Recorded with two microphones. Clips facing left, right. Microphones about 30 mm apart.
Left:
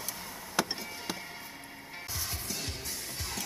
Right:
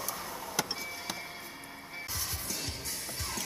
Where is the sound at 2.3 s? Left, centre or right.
Centre.